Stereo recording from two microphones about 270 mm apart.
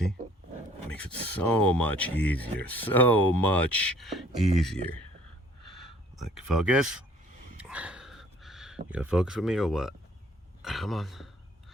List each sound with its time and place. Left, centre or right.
0.9 s speech: centre
5.6 s a sound: left
6.1 s speech: centre
7.6 s dog: centre
8.9 s speech: centre